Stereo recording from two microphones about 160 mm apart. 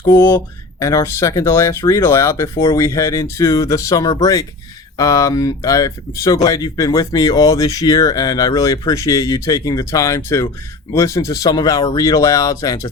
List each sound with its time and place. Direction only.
0.0 s speech: 15° left (ahead or behind)